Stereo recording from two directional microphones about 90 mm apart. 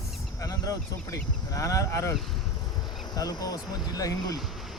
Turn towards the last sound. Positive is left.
turn(degrees=45)  # may be behind; listen again after turning